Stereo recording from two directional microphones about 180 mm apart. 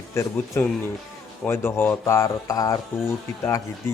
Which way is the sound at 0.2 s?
15° left (ahead or behind).